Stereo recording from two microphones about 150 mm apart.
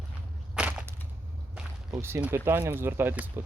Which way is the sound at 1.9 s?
15° right (ahead or behind).